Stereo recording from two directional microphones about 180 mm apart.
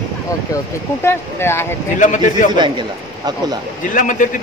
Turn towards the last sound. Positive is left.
turn(degrees=45)  # may be behind; listen again after turning